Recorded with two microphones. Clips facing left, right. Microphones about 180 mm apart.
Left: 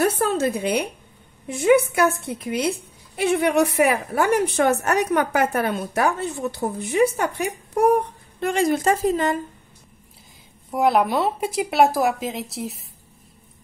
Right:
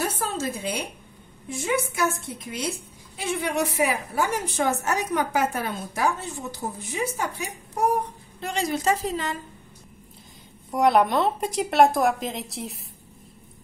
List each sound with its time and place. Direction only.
0.0 s a woman's voice: 60° left (ahead or behind)
10.7 s a woman's voice: centre (ahead or behind)